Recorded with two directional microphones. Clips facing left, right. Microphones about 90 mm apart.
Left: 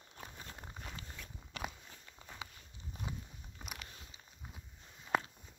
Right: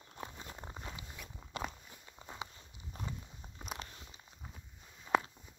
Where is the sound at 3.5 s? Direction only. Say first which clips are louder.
Right 5 dB; 30° right (ahead or behind).